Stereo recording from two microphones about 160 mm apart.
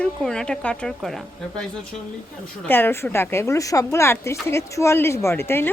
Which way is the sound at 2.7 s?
15° left (ahead or behind).